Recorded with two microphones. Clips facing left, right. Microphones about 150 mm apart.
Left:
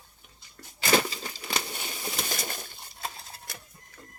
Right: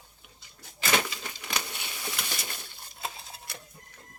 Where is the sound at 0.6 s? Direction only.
65° left (ahead or behind).